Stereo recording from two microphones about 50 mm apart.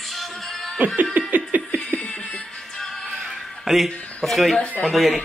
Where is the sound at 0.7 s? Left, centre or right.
Right.